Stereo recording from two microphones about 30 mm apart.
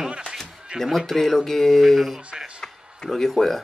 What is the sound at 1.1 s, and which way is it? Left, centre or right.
Speech, centre.